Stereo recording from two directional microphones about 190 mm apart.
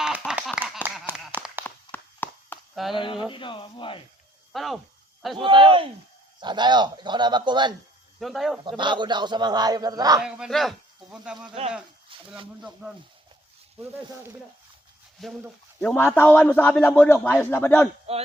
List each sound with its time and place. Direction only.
0.3 s a sound: 5° right (ahead or behind)
1.6 s walk: 10° left (ahead or behind)
2.9 s speech: 25° left (ahead or behind)
4.5 s speech: centre (ahead or behind)
5.4 s speech: 25° right (ahead or behind)
8.2 s speech: centre (ahead or behind)
8.6 s speech: 25° right (ahead or behind)
10.2 s speech: 5° right (ahead or behind)
11.6 s speech: 30° right (ahead or behind)
15.2 s a man's voice: centre (ahead or behind)
18.1 s speech: 30° right (ahead or behind)